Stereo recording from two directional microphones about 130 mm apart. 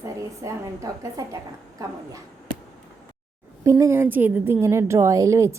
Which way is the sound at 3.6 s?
25° right (ahead or behind).